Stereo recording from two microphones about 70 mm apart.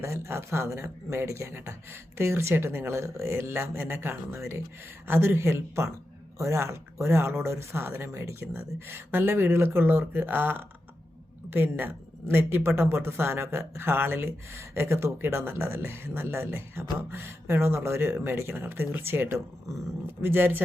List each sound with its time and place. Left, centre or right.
0.0 s speech: right